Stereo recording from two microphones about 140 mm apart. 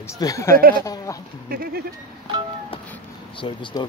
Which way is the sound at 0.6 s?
90° right.